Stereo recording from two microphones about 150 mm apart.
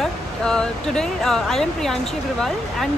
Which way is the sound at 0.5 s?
5° left (ahead or behind).